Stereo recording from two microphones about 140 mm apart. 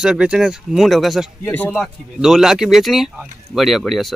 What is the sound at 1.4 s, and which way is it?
Speech, 15° left (ahead or behind).